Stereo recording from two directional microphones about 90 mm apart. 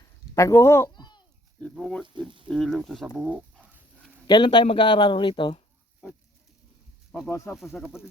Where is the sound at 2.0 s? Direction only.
60° right (ahead or behind).